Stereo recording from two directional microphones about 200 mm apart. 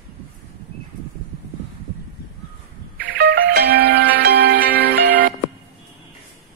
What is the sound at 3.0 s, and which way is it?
Music, 50° right (ahead or behind).